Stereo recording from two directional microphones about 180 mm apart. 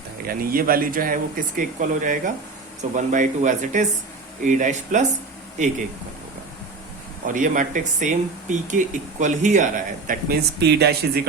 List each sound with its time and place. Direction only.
0.3 s speech: 55° right (ahead or behind)
7.3 s speech: 45° right (ahead or behind)
10.6 s speech: 65° right (ahead or behind)